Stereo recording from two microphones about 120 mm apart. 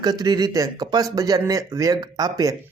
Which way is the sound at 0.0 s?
35° right (ahead or behind).